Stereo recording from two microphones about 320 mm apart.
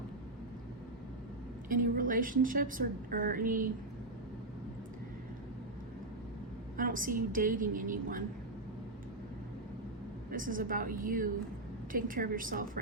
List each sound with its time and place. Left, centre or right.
1.7 s a woman's voice: right
6.7 s a woman's voice: right
10.3 s a woman's voice: right